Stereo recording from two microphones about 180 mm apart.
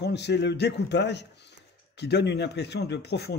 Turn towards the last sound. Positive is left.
turn(degrees=65)  # may be behind; listen again after turning